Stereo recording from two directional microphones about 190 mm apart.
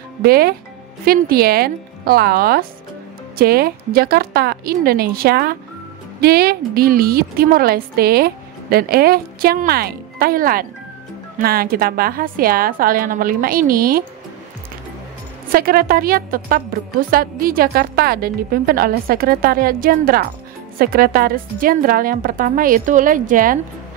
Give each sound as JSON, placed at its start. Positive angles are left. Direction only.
{"t": 0.2, "sound": "a woman's voice", "side_deg": -55}
{"t": 15.5, "sound": "a woman's voice", "side_deg": -50}